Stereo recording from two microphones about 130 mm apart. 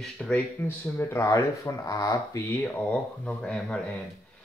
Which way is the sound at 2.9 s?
10° left (ahead or behind).